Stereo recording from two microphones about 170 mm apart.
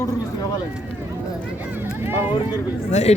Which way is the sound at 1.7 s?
15° right (ahead or behind).